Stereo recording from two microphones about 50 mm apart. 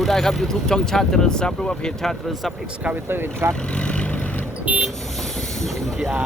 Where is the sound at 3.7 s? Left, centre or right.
Left.